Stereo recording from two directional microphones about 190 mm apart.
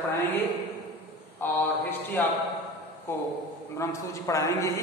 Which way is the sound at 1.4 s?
10° left (ahead or behind).